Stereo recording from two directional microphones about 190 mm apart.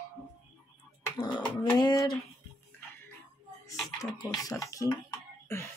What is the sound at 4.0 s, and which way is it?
Speech, 20° left (ahead or behind).